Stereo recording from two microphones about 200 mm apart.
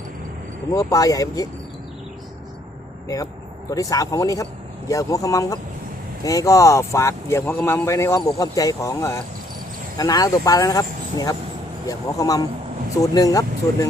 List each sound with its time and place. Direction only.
0.7 s a man's voice: 15° left (ahead or behind)
3.7 s a man's voice: 15° left (ahead or behind)